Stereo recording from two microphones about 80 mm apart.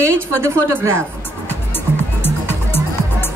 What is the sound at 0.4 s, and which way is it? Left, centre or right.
Speech, right.